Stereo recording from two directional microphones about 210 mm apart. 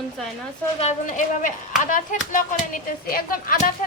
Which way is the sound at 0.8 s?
35° left (ahead or behind).